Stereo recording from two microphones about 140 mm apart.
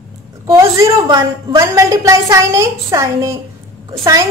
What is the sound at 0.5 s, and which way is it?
A woman's voice, 20° right (ahead or behind).